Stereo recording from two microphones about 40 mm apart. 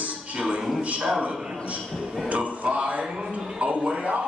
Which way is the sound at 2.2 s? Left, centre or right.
Right.